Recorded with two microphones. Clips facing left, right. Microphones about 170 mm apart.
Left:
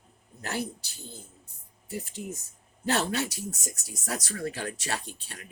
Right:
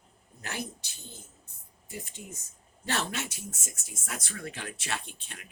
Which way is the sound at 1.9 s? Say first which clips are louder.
Left 7 dB; 35° left (ahead or behind).